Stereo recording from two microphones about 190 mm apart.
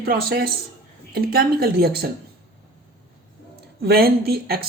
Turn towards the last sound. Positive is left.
turn(degrees=-55)  # may be behind; listen again after turning